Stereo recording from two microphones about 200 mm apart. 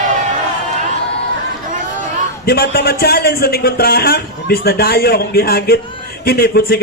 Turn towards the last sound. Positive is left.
turn(degrees=50)  # may be behind; listen again after turning